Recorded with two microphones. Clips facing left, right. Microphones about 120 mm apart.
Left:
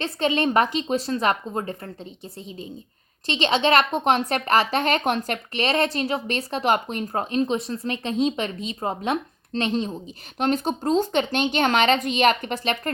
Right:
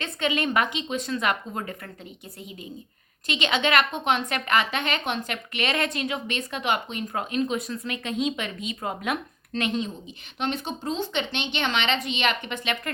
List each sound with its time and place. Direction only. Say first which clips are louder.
0.0 s speech: left 4 dB; 35° left (ahead or behind)
3.2 s speech: left 4 dB; 35° left (ahead or behind)